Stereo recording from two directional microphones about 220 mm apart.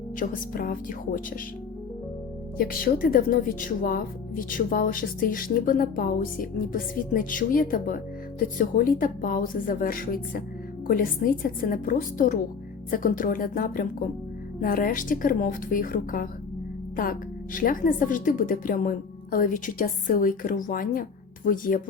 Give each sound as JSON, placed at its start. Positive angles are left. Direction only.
{"t": 0.2, "sound": "a woman's voice", "side_deg": 40}
{"t": 2.6, "sound": "a woman's voice", "side_deg": 40}